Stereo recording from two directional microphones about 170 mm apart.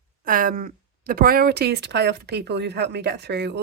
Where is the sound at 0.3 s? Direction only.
55° right (ahead or behind).